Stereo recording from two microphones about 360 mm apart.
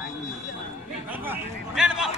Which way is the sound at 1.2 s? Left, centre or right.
Centre.